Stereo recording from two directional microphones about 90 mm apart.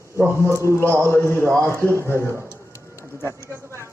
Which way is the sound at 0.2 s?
30° right (ahead or behind).